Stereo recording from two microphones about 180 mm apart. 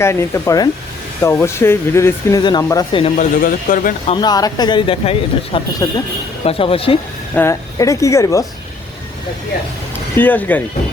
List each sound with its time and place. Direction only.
0.0 s speech: 15° left (ahead or behind)
3.0 s speech: 45° left (ahead or behind)
4.1 s speech: 25° left (ahead or behind)
7.3 s speech: 15° left (ahead or behind)
10.2 s speech: 10° left (ahead or behind)